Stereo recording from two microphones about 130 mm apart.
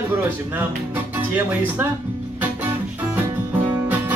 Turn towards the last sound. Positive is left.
turn(degrees=-15)  # may be behind; listen again after turning